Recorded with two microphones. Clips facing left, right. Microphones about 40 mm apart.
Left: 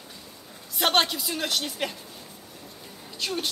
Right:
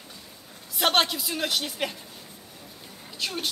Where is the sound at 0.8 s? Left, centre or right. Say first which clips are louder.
Even; centre.